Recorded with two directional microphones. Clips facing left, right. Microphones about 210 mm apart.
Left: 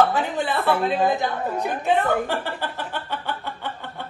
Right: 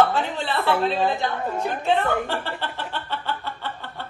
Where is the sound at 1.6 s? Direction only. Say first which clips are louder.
Left 1 dB; 15° left (ahead or behind).